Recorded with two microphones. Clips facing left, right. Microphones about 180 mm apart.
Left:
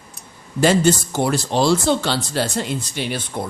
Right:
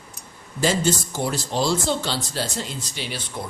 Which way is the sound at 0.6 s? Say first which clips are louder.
Left 6 dB; 65° left (ahead or behind).